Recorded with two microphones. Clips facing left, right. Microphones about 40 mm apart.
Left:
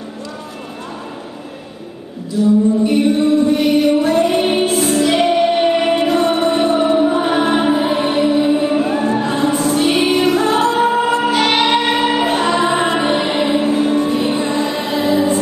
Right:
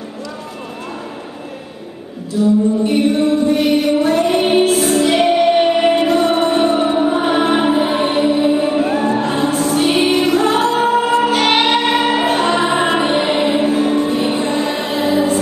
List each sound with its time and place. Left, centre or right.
2.4 s a sound: centre
2.8 s music: centre
6.5 s music: centre